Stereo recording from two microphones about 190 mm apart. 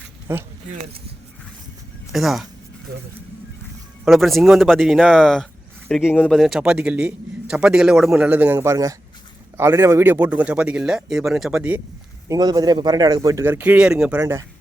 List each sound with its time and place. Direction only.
0.3 s speech: 10° right (ahead or behind)
2.1 s a man's voice: centre (ahead or behind)
4.0 s a man's voice: centre (ahead or behind)
12.3 s speech: 20° right (ahead or behind); by 14.2 s 5° right (ahead or behind)
14.2 s speech: 15° right (ahead or behind)